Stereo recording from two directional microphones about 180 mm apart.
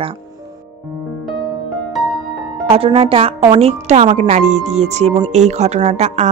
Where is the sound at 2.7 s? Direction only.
30° right (ahead or behind).